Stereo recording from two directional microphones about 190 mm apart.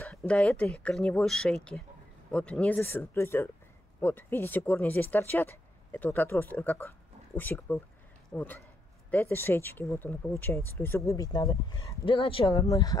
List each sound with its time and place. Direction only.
0.1 s speech: centre (ahead or behind); by 12.6 s 30° left (ahead or behind)
12.6 s speech: 20° left (ahead or behind)